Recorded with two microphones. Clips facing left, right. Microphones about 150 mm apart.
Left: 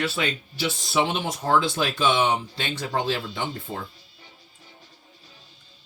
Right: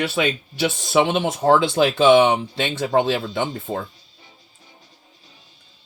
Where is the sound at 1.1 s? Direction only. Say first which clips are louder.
Right 6 dB; 65° right (ahead or behind).